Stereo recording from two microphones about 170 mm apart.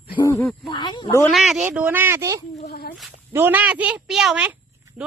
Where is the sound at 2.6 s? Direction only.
65° left (ahead or behind).